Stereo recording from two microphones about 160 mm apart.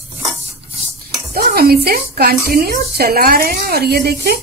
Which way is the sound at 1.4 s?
75° right (ahead or behind).